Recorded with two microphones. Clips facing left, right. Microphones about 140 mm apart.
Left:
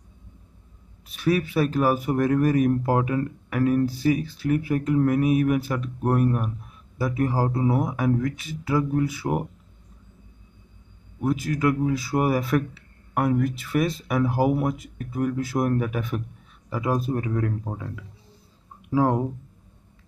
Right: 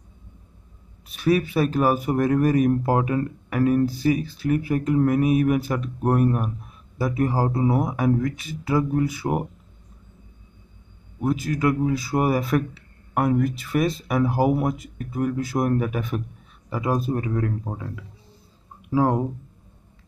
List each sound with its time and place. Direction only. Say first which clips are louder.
1.2 s speech: right 2 dB; 15° right (ahead or behind)
4.1 s speech: right 1 dB; 5° right (ahead or behind)
11.1 s speech: right 1 dB; 10° right (ahead or behind)
18.9 s speech: right 1 dB; 10° right (ahead or behind)